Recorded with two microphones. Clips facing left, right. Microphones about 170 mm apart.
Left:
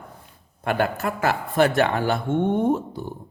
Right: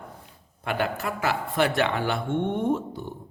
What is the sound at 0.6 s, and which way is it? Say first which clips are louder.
A man's voice: left 4 dB; 50° left (ahead or behind).